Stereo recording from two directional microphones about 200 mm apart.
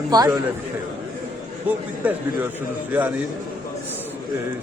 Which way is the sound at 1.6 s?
10° right (ahead or behind).